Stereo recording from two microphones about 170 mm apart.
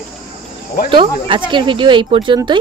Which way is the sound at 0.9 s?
30° right (ahead or behind).